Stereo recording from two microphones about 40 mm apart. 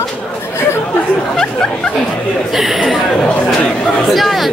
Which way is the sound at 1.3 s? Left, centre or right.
Centre.